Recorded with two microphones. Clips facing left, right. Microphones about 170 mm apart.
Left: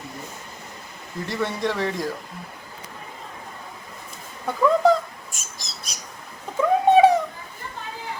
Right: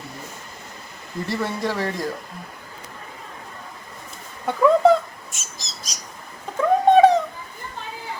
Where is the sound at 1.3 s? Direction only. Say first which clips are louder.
Even; 5° right (ahead or behind).